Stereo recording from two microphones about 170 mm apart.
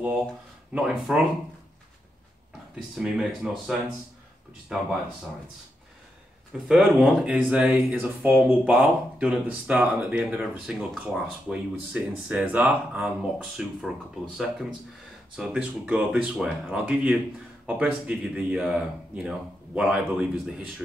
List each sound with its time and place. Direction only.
1.1 s speech: 5° right (ahead or behind)
2.7 s speech: centre (ahead or behind)
6.7 s speech: 5° right (ahead or behind)